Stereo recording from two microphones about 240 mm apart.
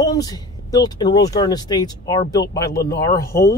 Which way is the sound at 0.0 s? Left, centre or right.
Centre.